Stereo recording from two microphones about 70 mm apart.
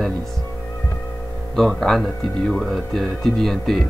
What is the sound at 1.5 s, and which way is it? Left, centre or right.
Speech, centre.